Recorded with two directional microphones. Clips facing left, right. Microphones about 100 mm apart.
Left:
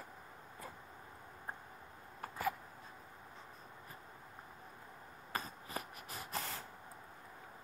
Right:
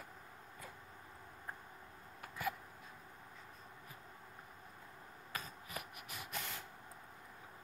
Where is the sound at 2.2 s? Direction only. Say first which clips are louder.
Left 3 dB; 35° left (ahead or behind).